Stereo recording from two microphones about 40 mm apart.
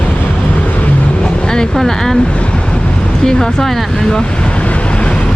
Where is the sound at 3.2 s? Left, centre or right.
Centre.